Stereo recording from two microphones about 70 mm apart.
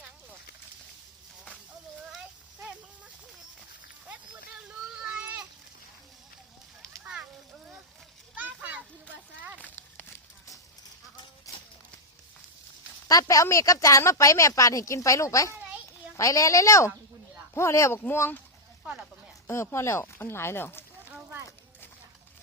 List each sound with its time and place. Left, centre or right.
7.0 s a sound: centre
8.4 s children playing: right
9.6 s a sound: left
13.1 s a woman's voice: left
18.1 s speech: left
19.5 s speech: left